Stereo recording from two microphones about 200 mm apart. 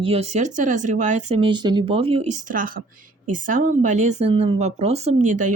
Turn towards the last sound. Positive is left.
turn(degrees=-40)  # may be behind; listen again after turning